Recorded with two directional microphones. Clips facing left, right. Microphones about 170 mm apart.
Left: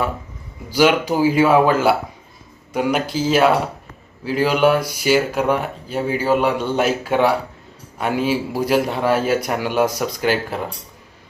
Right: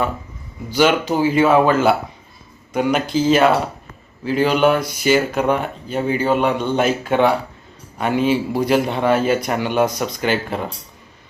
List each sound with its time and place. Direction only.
0.7 s a man's voice: 10° left (ahead or behind)